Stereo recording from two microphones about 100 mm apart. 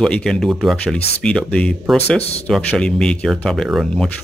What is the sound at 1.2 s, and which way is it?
Speech, 10° left (ahead or behind).